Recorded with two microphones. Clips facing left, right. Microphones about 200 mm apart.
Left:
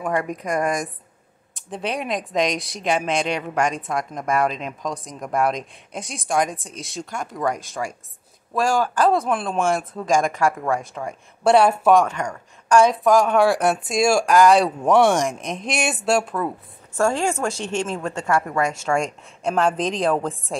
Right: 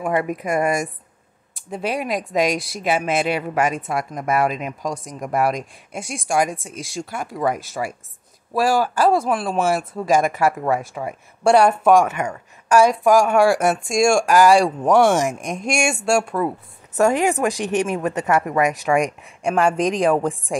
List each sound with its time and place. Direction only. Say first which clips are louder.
0.0 s speech: right 2 dB; 5° right (ahead or behind)
16.4 s speech: right 3 dB; 20° right (ahead or behind)